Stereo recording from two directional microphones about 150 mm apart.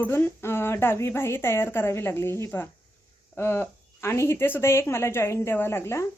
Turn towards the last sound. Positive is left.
turn(degrees=20)  # may be behind; listen again after turning